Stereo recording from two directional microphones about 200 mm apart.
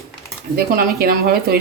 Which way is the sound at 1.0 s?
50° right (ahead or behind).